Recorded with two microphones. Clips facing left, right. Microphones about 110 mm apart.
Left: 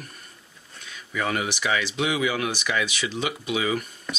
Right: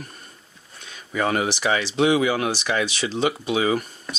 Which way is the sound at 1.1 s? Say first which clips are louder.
Right 4 dB; 35° right (ahead or behind).